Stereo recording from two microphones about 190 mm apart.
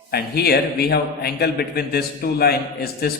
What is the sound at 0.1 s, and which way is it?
A man's voice, 55° left (ahead or behind).